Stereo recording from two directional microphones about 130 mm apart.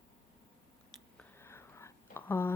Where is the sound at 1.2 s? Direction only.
20° left (ahead or behind).